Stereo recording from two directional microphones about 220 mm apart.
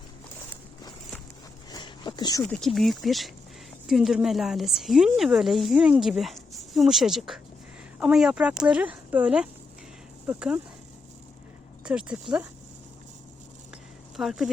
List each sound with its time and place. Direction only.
1.7 s dog: 20° left (ahead or behind)
2.4 s speech: 5° left (ahead or behind)
11.9 s speech: 5° right (ahead or behind)
14.2 s speech: centre (ahead or behind)